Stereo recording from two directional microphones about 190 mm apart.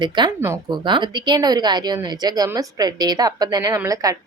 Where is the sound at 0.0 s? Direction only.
20° right (ahead or behind).